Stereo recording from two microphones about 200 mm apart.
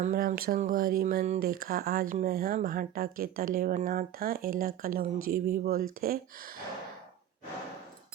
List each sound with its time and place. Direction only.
0.0 s speech: 40° right (ahead or behind)